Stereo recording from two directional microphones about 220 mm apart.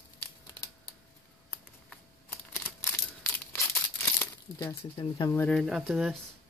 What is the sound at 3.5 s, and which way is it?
Crumpling, 10° left (ahead or behind).